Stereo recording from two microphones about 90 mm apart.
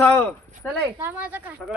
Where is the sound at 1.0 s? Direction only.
20° right (ahead or behind).